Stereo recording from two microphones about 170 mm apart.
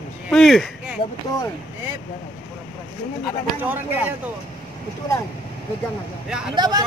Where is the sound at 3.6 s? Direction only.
10° right (ahead or behind).